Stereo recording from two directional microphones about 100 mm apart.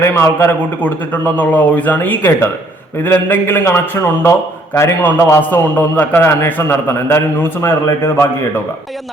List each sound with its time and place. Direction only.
0.0 s a man's voice: 25° left (ahead or behind)